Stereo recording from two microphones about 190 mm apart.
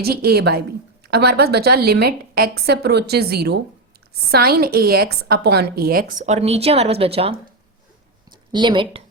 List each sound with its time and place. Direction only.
0.0 s a woman's voice: 55° right (ahead or behind); by 7.3 s 30° right (ahead or behind)
8.5 s a woman's voice: 25° right (ahead or behind)